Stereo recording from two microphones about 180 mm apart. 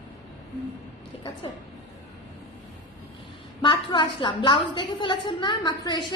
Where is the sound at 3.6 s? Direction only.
25° left (ahead or behind).